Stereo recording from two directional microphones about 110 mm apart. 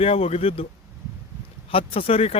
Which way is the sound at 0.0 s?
65° left (ahead or behind).